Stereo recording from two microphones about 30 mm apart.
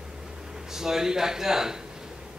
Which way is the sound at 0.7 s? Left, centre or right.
Centre.